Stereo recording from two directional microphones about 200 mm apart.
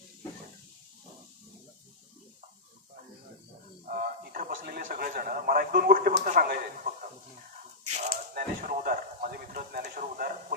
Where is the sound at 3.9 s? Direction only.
45° right (ahead or behind).